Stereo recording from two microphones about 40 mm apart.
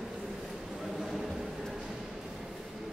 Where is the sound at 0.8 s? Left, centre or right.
Centre.